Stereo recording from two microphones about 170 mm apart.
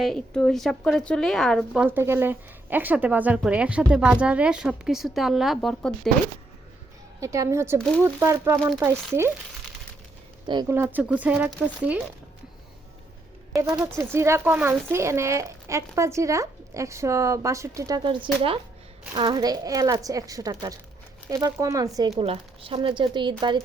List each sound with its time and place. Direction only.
0.0 s speech: 5° left (ahead or behind)
7.2 s speech: 20° right (ahead or behind)
7.8 s speech: 5° left (ahead or behind)
8.0 s speech: 15° right (ahead or behind)
10.4 s speech: 25° right (ahead or behind)
10.8 s speech: 10° right (ahead or behind)
13.7 s speech: 15° right (ahead or behind)
22.2 s speech: 35° right (ahead or behind)